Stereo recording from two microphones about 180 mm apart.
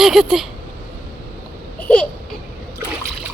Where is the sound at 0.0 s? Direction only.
Centre (ahead or behind).